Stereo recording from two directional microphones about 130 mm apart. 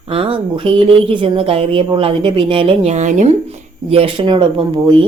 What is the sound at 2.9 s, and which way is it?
A woman's voice, 60° right (ahead or behind).